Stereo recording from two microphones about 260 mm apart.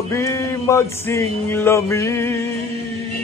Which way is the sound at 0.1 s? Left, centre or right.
Centre.